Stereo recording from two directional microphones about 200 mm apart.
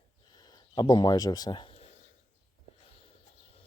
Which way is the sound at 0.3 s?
20° left (ahead or behind).